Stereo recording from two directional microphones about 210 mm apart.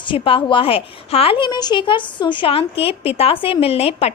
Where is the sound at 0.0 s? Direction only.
25° left (ahead or behind).